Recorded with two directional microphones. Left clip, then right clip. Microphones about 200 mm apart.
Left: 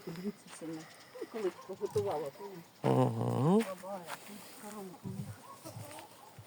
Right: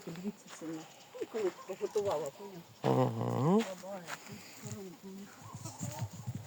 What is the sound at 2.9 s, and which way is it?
Dog, 20° left (ahead or behind).